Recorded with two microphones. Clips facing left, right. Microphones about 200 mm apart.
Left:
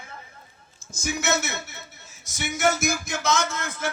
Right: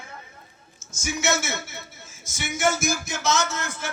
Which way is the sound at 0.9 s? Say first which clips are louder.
Left 1 dB; 55° left (ahead or behind).